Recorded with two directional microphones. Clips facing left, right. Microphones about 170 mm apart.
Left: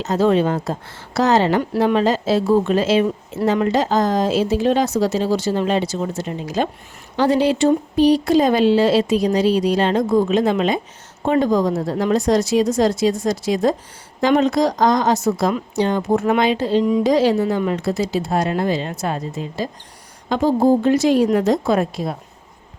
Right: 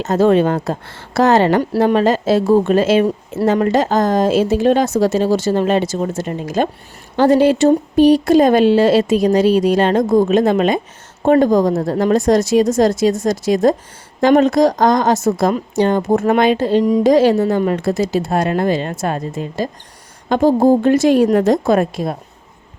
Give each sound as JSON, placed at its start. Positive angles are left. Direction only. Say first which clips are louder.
{"t": 0.0, "sound": "a woman's voice", "louder": "right 4 dB", "side_deg": -50}